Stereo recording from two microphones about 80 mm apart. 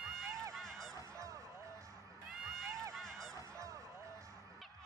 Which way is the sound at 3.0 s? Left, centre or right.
Centre.